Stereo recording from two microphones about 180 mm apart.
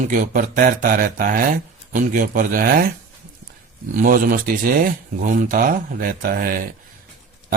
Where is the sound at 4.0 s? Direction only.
50° right (ahead or behind).